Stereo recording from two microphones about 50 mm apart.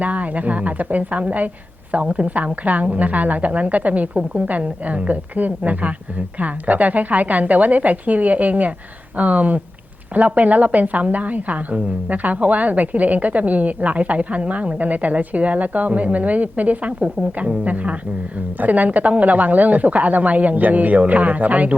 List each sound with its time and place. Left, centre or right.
0.0 s a woman's voice: right